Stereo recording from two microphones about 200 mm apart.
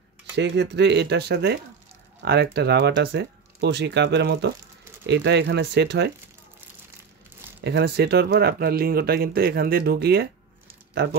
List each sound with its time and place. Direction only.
0.4 s speech: 60° right (ahead or behind)
7.6 s speech: 55° right (ahead or behind)